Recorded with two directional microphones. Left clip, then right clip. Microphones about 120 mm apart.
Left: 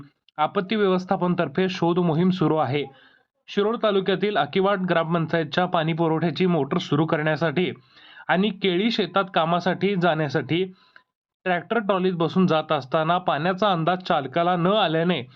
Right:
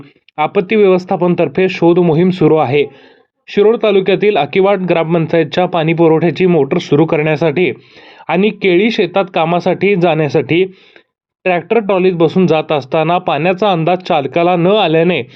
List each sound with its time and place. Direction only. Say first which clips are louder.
0.3 s speech: right 11 dB; 35° right (ahead or behind)